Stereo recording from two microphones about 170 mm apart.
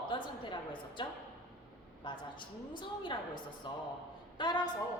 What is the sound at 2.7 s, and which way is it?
A woman's voice, 30° left (ahead or behind).